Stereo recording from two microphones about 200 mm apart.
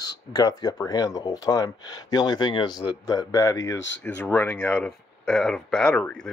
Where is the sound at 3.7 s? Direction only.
65° left (ahead or behind).